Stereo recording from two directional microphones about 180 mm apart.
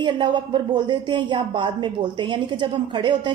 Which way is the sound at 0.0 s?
25° right (ahead or behind).